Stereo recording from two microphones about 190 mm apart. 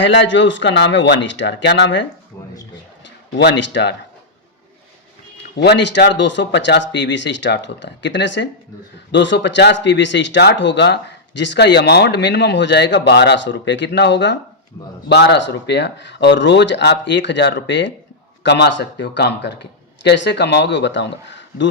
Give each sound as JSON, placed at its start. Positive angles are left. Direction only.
{"t": 0.0, "sound": "speech", "side_deg": 75}
{"t": 3.3, "sound": "speech", "side_deg": 70}
{"t": 5.5, "sound": "speech", "side_deg": 65}